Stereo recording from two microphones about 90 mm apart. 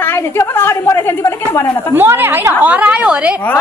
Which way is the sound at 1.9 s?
20° right (ahead or behind).